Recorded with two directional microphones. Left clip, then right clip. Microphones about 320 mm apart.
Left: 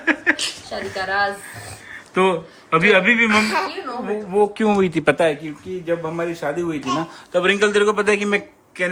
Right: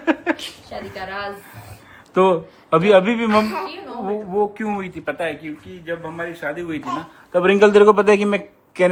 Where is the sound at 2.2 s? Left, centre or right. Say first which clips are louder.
Right 2 dB; centre.